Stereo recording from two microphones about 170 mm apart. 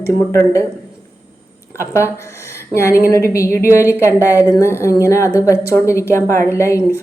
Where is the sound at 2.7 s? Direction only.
15° left (ahead or behind).